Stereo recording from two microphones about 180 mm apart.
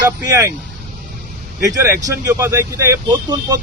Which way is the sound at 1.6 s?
15° right (ahead or behind).